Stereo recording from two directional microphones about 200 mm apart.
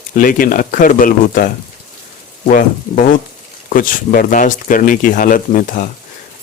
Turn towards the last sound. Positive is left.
turn(degrees=40)  # may be behind; listen again after turning